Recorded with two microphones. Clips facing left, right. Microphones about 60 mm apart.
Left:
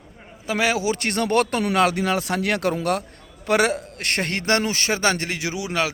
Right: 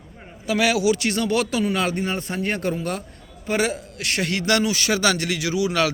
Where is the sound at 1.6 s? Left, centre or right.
Left.